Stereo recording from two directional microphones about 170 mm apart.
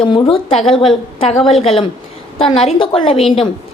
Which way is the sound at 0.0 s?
30° left (ahead or behind).